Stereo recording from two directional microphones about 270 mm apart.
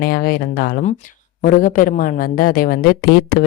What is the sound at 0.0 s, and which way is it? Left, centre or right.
Speech, left.